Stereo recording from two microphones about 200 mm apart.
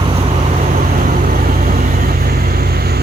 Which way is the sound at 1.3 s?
45° right (ahead or behind).